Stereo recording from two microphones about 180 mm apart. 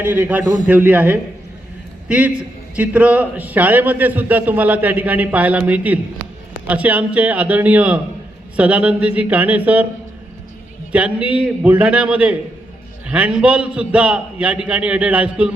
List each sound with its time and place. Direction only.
0.0 s a man's voice: 10° right (ahead or behind)
0.4 s a man's voice: 45° left (ahead or behind)
0.7 s a man's voice: 10° right (ahead or behind)
10.9 s a man's voice: 5° right (ahead or behind)